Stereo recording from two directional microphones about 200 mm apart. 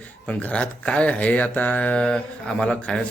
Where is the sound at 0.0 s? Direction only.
5° left (ahead or behind).